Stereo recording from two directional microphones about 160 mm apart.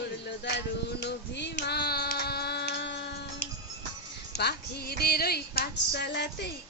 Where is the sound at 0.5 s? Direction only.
90° left.